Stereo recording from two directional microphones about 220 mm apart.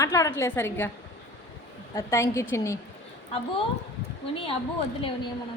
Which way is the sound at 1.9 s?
15° left (ahead or behind).